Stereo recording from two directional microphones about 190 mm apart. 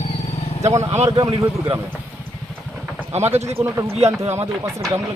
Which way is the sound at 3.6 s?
15° right (ahead or behind).